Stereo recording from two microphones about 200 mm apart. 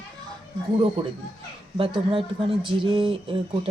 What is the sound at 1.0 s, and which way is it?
Speech, 25° right (ahead or behind).